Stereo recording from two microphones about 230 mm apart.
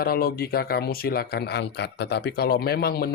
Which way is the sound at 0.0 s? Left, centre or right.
Left.